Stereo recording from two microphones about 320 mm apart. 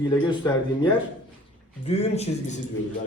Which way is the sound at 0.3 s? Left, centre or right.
Centre.